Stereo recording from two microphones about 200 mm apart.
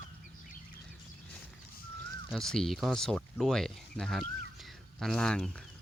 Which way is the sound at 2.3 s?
Centre (ahead or behind).